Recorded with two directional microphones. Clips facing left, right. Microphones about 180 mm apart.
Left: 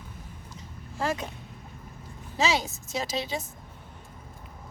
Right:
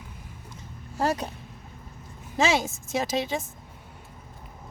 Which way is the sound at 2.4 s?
50° right (ahead or behind).